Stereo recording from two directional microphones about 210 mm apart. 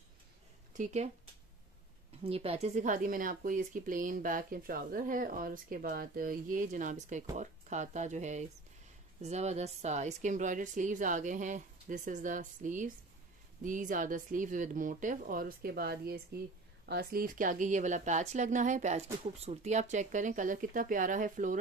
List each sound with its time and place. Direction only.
0.7 s speech: 30° right (ahead or behind)
2.2 s speech: 30° right (ahead or behind)